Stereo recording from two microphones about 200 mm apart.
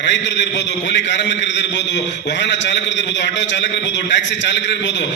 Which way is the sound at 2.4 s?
65° left (ahead or behind).